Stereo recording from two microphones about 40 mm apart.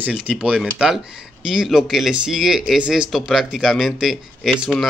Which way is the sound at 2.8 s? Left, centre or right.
Right.